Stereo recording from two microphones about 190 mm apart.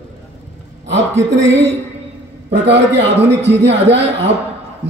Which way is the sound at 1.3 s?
70° right (ahead or behind).